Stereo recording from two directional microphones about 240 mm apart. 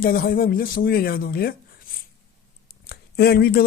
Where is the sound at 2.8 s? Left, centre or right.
Left.